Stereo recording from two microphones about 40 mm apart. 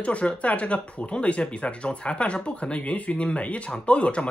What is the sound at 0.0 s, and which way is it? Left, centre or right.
Speech, left.